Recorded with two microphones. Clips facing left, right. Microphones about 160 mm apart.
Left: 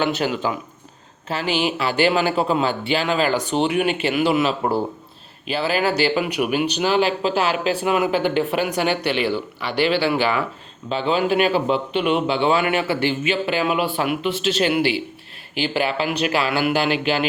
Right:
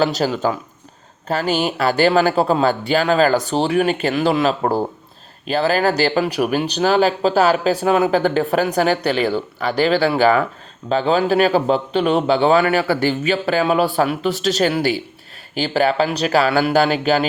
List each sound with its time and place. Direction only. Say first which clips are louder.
0.0 s speech: right 3 dB; 35° right (ahead or behind)